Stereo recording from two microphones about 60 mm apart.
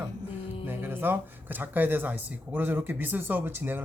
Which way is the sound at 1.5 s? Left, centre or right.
Right.